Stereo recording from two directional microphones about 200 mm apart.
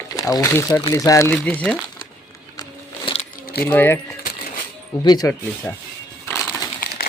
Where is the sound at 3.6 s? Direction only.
10° left (ahead or behind).